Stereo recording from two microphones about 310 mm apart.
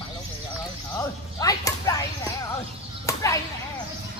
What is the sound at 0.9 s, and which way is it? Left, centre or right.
Arrow, centre.